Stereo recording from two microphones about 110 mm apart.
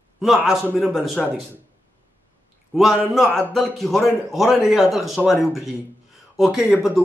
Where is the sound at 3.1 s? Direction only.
5° left (ahead or behind).